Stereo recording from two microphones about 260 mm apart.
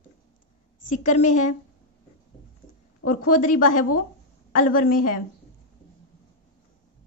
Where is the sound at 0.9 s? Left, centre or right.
Left.